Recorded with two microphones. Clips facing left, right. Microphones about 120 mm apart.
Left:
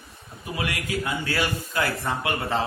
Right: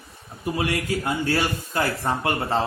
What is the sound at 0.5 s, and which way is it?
A man's voice, 40° right (ahead or behind).